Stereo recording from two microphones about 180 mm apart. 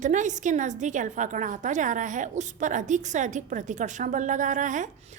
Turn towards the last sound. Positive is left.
turn(degrees=-45)  # may be behind; listen again after turning